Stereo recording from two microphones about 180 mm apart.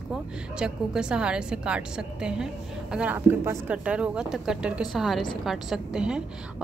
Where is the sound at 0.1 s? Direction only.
5° right (ahead or behind).